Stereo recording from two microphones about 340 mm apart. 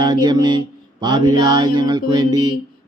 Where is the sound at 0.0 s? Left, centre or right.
Centre.